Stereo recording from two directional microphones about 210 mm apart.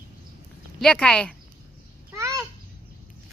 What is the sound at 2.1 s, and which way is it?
Babbling, 15° right (ahead or behind).